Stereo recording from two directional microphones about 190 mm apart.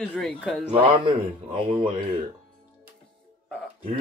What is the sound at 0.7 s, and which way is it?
Speech, 25° right (ahead or behind).